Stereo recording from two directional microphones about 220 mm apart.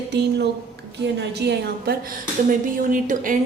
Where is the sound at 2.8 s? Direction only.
35° right (ahead or behind).